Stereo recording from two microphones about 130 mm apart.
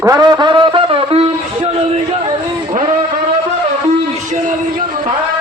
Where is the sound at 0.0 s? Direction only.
30° right (ahead or behind); by 1.3 s 45° right (ahead or behind).